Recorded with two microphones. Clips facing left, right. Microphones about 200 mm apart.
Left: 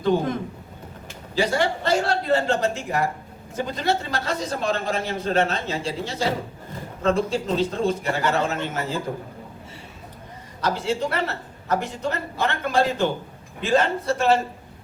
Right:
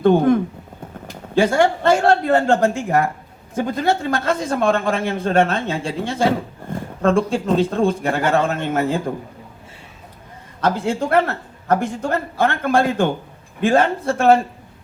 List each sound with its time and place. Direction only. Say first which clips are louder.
0.0 s a man's voice: right 8 dB; 55° right (ahead or behind)
10.6 s a man's voice: right 4 dB; 55° right (ahead or behind)